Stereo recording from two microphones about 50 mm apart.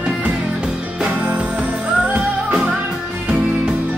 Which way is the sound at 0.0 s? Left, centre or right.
Right.